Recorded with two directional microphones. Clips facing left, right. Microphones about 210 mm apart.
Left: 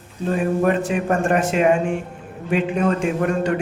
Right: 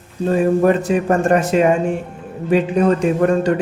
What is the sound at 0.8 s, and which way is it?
Speech, 35° right (ahead or behind).